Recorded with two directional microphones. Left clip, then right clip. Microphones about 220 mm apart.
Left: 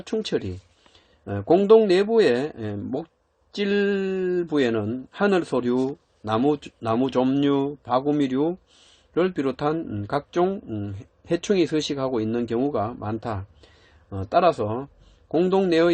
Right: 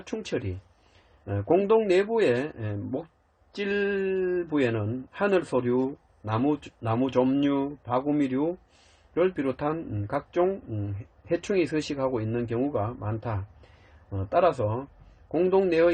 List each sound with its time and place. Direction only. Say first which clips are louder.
0.1 s speech: left 6 dB; 40° left (ahead or behind)